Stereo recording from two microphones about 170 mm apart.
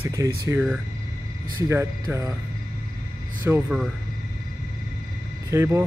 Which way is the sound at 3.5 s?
10° right (ahead or behind).